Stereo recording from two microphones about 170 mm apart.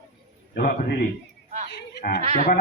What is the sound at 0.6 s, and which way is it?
Speech, 60° left (ahead or behind).